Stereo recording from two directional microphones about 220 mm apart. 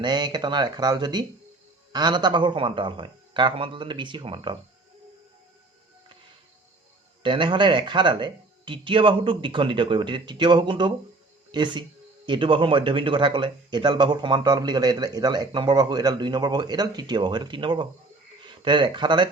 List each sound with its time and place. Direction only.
0.0 s speech: 20° right (ahead or behind)
7.2 s speech: 20° right (ahead or behind)